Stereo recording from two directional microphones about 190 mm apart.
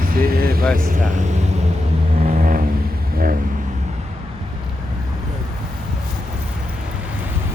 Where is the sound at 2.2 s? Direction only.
45° right (ahead or behind).